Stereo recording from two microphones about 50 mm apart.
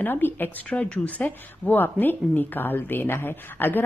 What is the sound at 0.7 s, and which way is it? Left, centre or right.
Speech, left.